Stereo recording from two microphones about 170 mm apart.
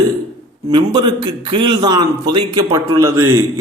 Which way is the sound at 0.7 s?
25° right (ahead or behind).